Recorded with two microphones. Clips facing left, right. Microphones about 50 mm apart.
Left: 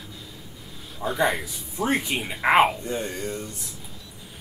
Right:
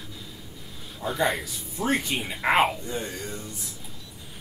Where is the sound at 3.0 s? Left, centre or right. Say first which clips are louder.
Left 4 dB; left.